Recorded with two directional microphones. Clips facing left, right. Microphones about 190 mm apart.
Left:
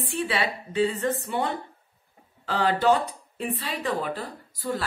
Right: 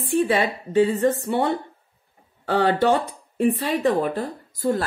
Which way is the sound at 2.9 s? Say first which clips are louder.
Right 2 dB; 45° right (ahead or behind).